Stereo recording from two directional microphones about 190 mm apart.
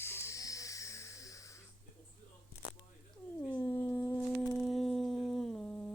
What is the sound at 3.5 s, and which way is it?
Dog, 20° left (ahead or behind).